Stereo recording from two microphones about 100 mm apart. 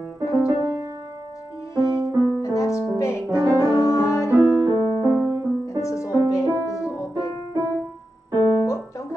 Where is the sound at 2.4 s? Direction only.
30° left (ahead or behind).